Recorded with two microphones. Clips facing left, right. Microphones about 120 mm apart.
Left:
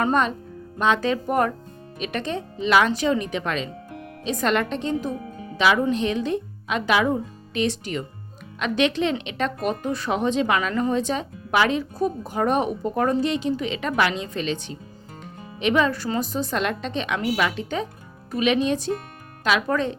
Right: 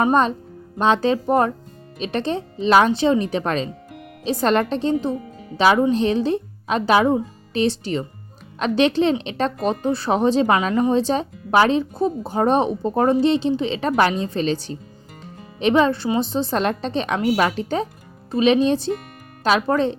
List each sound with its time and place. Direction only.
0.1 s speech: 30° right (ahead or behind)
15.2 s music: 35° right (ahead or behind)
16.0 s speech: 25° right (ahead or behind)